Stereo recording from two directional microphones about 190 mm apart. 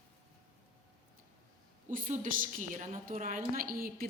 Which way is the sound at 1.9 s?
45° right (ahead or behind).